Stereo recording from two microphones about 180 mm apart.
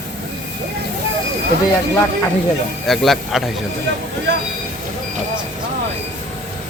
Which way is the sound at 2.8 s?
Centre (ahead or behind).